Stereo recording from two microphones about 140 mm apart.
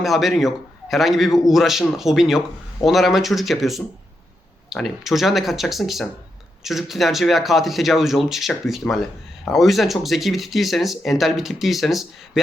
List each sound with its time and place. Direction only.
0.0 s speech: centre (ahead or behind)